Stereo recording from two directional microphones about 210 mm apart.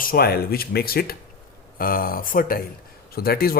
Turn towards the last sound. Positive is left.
turn(degrees=45)  # may be behind; listen again after turning